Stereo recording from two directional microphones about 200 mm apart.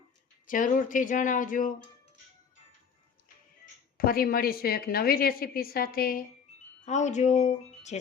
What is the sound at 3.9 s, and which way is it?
A woman's voice, 45° left (ahead or behind).